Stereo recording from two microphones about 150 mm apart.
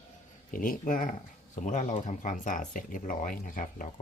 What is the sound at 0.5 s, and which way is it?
Speech, 65° left (ahead or behind).